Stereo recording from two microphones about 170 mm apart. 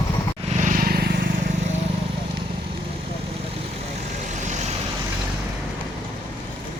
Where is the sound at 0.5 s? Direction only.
55° right (ahead or behind).